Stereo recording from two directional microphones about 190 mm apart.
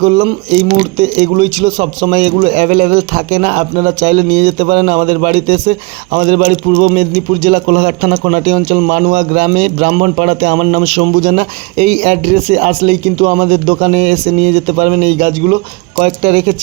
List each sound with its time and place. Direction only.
0.0 s speech: 35° right (ahead or behind)